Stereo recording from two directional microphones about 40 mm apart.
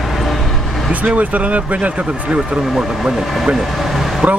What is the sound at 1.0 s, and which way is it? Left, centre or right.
Speech, right.